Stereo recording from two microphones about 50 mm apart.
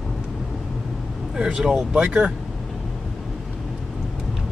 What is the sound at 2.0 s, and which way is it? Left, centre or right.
Speech, right.